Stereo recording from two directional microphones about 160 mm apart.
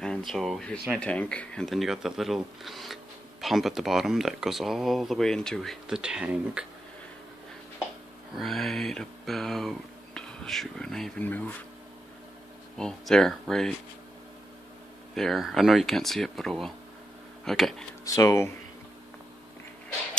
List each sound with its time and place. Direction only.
0.0 s speech: centre (ahead or behind)
8.4 s speech: centre (ahead or behind)
12.7 s speech: 5° left (ahead or behind)
15.1 s speech: centre (ahead or behind)
18.0 s speech: 20° left (ahead or behind)